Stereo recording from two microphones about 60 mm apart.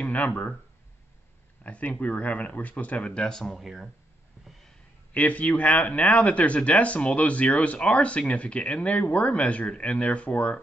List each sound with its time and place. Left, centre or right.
0.0 s speech: left
1.6 s speech: left; by 3.9 s centre
4.5 s a sound: centre
5.1 s speech: left